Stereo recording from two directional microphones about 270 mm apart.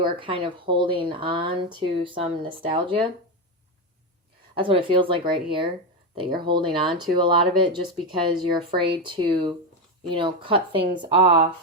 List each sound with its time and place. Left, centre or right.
0.0 s speech: centre
4.5 s speech: centre